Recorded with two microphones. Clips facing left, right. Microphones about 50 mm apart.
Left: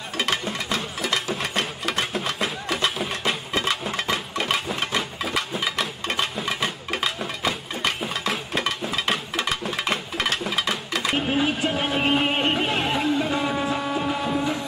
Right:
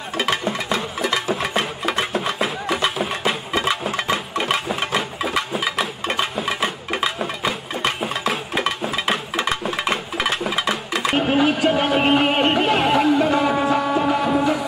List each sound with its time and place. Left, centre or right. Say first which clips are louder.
0.2 s music: right 4 dB; centre